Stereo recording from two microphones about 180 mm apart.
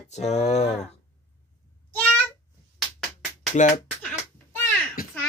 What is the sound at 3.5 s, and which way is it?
Speech, 40° left (ahead or behind).